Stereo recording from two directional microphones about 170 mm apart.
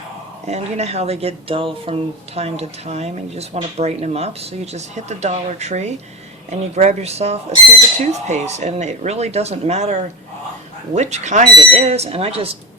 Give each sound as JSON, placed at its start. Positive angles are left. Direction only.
{"t": 0.4, "sound": "speech", "side_deg": -40}